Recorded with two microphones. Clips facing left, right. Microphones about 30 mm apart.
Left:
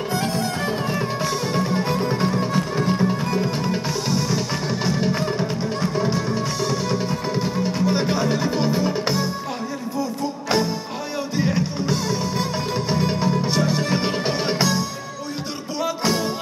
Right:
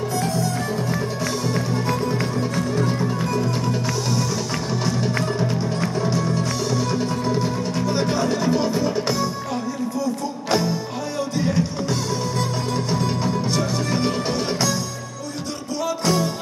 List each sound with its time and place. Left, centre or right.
0.1 s music: left
1.2 s music: left
10.5 s music: centre
15.8 s music: centre